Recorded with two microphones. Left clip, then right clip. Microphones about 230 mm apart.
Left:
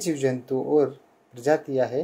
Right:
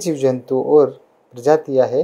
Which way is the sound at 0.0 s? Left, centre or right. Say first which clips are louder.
Right 7 dB; right.